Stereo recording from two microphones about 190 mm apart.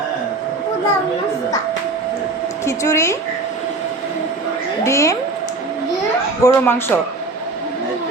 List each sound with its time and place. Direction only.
2.6 s speech: 15° left (ahead or behind)
4.8 s a woman's voice: 15° left (ahead or behind)
6.4 s speech: 10° left (ahead or behind)